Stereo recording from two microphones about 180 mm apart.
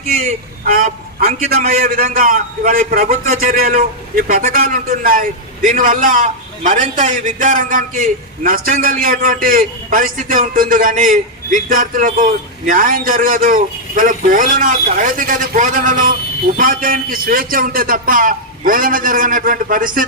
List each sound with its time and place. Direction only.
0.6 s a man's voice: 55° right (ahead or behind)